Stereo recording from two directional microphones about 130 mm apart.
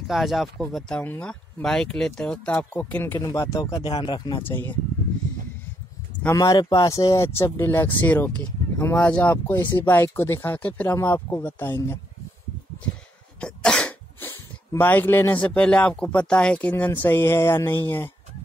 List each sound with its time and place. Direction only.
0.1 s speech: centre (ahead or behind)
3.2 s speech: 25° left (ahead or behind)
3.7 s speech: 40° left (ahead or behind)
4.4 s speech: 15° left (ahead or behind)
6.2 s speech: 25° left (ahead or behind)
13.4 s speech: 10° left (ahead or behind)